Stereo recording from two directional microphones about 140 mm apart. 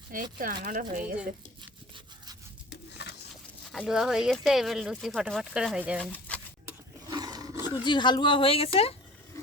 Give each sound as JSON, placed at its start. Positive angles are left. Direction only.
{"t": 0.1, "sound": "speech", "side_deg": -75}
{"t": 3.7, "sound": "speech", "side_deg": -5}
{"t": 6.0, "sound": "speech", "side_deg": 10}
{"t": 7.1, "sound": "roar", "side_deg": -30}
{"t": 7.9, "sound": "a woman's voice", "side_deg": 35}